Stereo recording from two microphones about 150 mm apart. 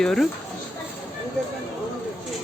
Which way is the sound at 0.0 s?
5° left (ahead or behind).